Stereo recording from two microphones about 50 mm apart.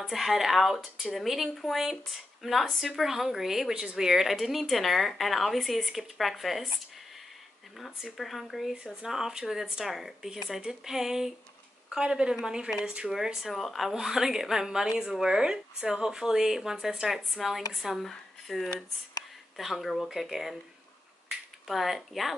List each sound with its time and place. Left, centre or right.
0.1 s speech: centre
7.7 s a woman's voice: centre